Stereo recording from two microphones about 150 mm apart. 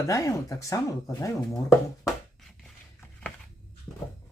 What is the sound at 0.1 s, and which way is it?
Speech, 20° left (ahead or behind).